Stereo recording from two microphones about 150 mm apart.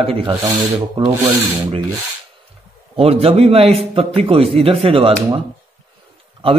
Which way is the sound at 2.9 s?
40° right (ahead or behind).